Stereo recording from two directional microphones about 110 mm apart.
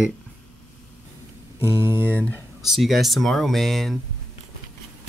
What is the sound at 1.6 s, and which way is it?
Speech, 25° right (ahead or behind).